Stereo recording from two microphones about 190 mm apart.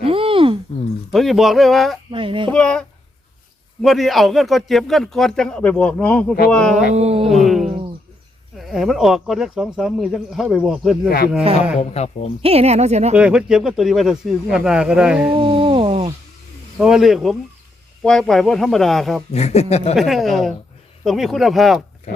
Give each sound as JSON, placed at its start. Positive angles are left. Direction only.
{"t": 0.0, "sound": "a sound", "side_deg": -30}
{"t": 1.1, "sound": "a man's voice", "side_deg": 0}
{"t": 2.0, "sound": "speech", "side_deg": -25}
{"t": 2.5, "sound": "a man's voice", "side_deg": 5}
{"t": 6.9, "sound": "speech", "side_deg": -35}
{"t": 7.3, "sound": "a man's voice", "side_deg": 0}
{"t": 11.8, "sound": "speech", "side_deg": 35}
{"t": 12.4, "sound": "speech", "side_deg": -30}
{"t": 13.1, "sound": "a man's voice", "side_deg": -5}
{"t": 15.4, "sound": "a sound", "side_deg": -25}
{"t": 16.7, "sound": "a man's voice", "side_deg": -5}
{"t": 19.3, "sound": "speech", "side_deg": 35}
{"t": 20.0, "sound": "a man's voice", "side_deg": 0}